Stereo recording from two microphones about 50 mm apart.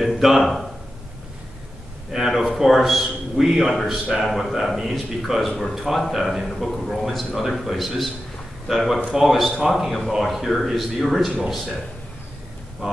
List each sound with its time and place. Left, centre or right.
0.0 s speech: centre
2.1 s a man's voice: centre